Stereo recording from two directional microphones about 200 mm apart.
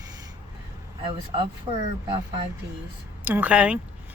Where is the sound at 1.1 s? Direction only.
25° right (ahead or behind).